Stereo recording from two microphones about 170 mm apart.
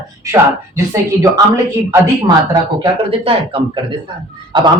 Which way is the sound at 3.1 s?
35° right (ahead or behind).